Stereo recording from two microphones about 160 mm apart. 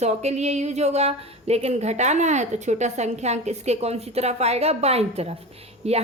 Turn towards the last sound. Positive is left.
turn(degrees=-40)  # may be behind; listen again after turning